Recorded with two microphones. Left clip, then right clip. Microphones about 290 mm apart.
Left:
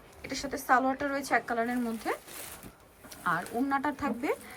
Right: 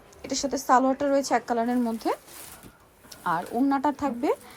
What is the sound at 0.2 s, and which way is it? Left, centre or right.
Speech, centre.